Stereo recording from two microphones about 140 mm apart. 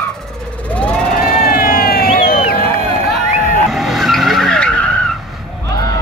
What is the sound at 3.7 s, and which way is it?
Vehicle, centre (ahead or behind).